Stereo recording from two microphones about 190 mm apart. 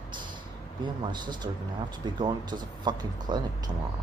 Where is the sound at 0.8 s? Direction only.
25° right (ahead or behind).